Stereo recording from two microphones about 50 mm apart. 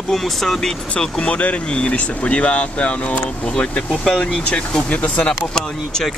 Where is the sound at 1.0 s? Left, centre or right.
Centre.